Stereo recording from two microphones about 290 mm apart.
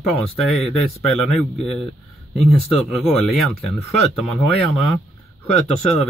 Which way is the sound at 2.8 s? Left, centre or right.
Centre.